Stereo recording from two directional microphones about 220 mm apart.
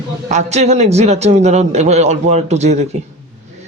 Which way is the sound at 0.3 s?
30° right (ahead or behind).